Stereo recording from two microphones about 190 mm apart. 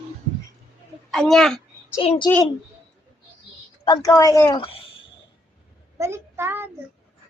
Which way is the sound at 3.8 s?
20° left (ahead or behind).